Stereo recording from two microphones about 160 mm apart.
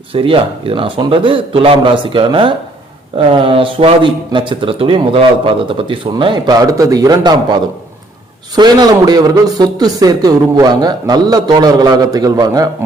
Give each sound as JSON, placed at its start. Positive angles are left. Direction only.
{"t": 0.1, "sound": "speech", "side_deg": -35}